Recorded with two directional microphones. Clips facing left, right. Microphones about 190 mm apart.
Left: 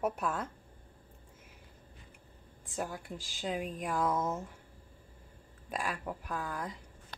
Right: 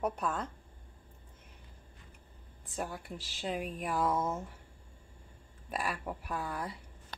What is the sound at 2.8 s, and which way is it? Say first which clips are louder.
A woman's voice: left 1 dB; centre (ahead or behind).